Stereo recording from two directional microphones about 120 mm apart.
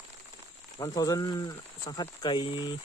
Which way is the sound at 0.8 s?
30° left (ahead or behind).